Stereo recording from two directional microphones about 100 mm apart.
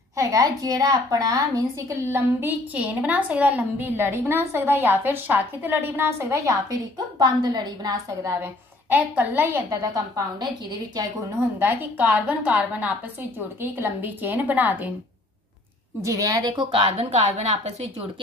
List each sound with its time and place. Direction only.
0.1 s a woman's voice: 35° right (ahead or behind)
7.2 s a woman's voice: 45° right (ahead or behind)
8.9 s a woman's voice: 15° right (ahead or behind)
9.7 s a woman's voice: 35° right (ahead or behind)
11.6 s a woman's voice: 20° right (ahead or behind)
16.0 s a woman's voice: 35° right (ahead or behind); by 16.8 s 55° right (ahead or behind)
16.9 s a woman's voice: 90° right